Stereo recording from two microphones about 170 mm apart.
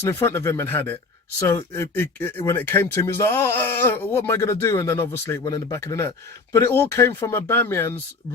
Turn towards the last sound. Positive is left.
turn(degrees=15)  # may be behind; listen again after turning